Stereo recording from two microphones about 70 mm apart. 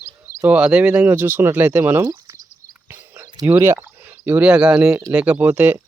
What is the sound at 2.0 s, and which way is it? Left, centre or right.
Speech, right.